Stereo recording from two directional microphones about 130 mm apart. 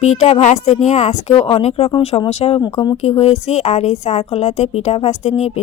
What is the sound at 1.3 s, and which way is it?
A woman's voice, 40° left (ahead or behind).